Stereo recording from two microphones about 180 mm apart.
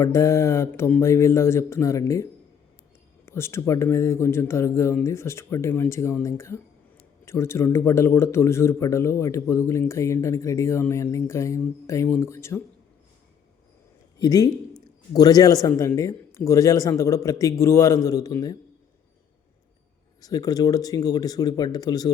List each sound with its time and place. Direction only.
0.0 s a man's voice: 15° left (ahead or behind)
3.2 s a man's voice: 15° left (ahead or behind)
14.2 s a man's voice: 20° left (ahead or behind)
20.2 s speech: 20° left (ahead or behind)